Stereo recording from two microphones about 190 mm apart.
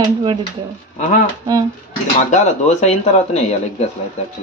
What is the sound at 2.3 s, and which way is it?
Speech, 35° left (ahead or behind).